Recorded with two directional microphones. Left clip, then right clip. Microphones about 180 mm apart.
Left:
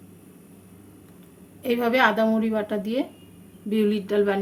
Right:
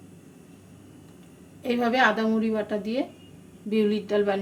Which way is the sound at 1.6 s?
25° left (ahead or behind).